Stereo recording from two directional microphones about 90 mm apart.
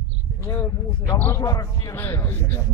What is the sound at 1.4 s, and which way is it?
Speech, 40° left (ahead or behind).